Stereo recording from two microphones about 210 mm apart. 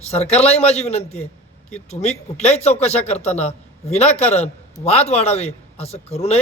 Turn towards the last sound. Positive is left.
turn(degrees=30)  # may be behind; listen again after turning